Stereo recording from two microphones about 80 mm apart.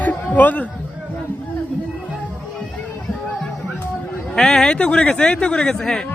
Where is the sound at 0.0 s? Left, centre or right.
Centre.